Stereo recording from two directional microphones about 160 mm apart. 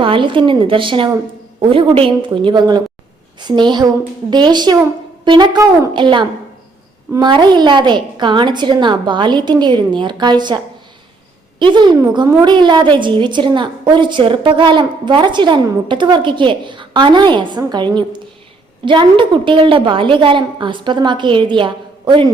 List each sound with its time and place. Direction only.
0.0 s a woman's voice: 30° right (ahead or behind)
11.6 s a woman's voice: 30° right (ahead or behind)